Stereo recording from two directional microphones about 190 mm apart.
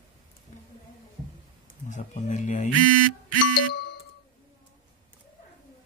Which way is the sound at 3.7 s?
65° left (ahead or behind).